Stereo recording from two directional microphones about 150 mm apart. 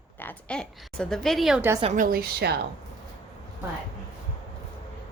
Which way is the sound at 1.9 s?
70° right (ahead or behind).